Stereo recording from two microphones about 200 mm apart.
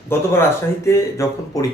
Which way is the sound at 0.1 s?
10° left (ahead or behind).